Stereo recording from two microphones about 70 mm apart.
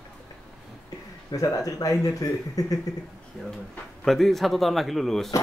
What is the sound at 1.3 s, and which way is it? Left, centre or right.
Speech, left.